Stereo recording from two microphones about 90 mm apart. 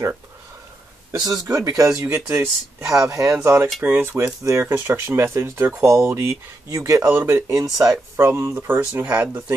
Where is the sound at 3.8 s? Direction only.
25° right (ahead or behind).